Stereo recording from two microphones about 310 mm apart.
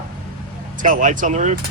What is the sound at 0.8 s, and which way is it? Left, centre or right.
Speech, right.